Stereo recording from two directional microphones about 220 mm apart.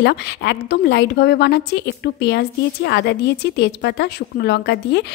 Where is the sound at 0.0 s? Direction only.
50° left (ahead or behind).